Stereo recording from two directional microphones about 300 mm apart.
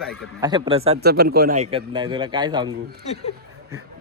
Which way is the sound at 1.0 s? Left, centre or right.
Right.